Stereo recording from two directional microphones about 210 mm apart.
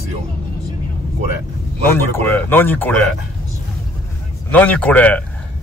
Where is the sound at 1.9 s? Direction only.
10° left (ahead or behind).